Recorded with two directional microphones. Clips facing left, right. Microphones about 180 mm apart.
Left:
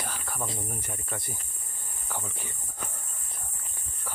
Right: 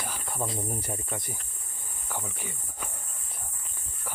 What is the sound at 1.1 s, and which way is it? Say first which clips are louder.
Speech: right 1 dB; 15° right (ahead or behind).